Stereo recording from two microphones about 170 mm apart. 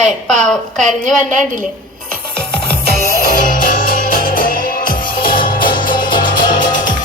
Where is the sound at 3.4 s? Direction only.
50° left (ahead or behind).